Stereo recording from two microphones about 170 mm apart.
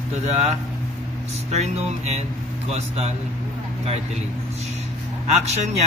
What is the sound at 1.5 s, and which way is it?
Speech, 40° right (ahead or behind).